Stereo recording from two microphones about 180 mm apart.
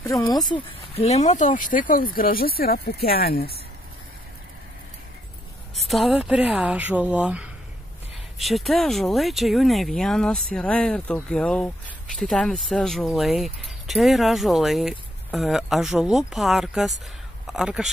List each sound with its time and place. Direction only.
0.1 s speech: 20° left (ahead or behind)
0.9 s speech: 35° left (ahead or behind); by 3.5 s 60° left (ahead or behind)
5.9 s speech: centre (ahead or behind)